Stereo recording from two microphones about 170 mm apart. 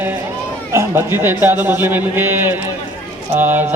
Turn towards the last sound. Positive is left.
turn(degrees=-10)  # may be behind; listen again after turning